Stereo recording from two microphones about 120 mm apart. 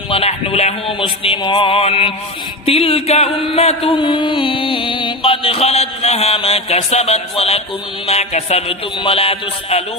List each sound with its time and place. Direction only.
0.1 s mantra: 55° left (ahead or behind)
8.0 s speech: 60° left (ahead or behind)